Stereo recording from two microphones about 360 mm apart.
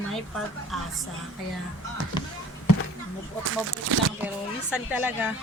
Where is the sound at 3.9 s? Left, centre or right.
Right.